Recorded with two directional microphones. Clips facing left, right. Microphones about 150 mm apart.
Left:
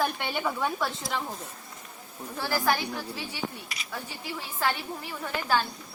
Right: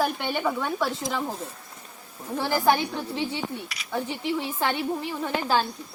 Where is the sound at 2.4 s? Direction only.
20° right (ahead or behind).